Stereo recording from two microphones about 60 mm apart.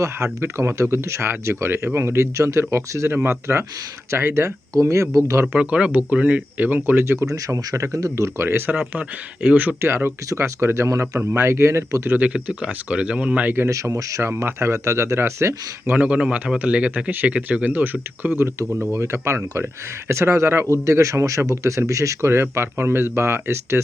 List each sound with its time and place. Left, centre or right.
0.0 s speech: right
4.8 s speech: right
5.5 s speech: centre; by 7.0 s right
7.0 s speech: right
8.9 s speech: right
9.8 s speech: right
12.1 s speech: right
13.7 s speech: right
15.9 s speech: right
18.9 s speech: right
22.3 s speech: right